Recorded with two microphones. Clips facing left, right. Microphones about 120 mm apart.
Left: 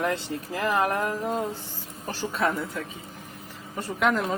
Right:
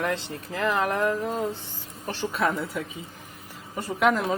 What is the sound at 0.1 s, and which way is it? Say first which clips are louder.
Speech: left 1 dB; 5° left (ahead or behind).